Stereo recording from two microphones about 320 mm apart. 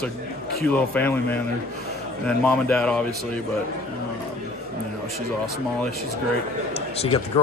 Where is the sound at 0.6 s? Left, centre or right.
Centre.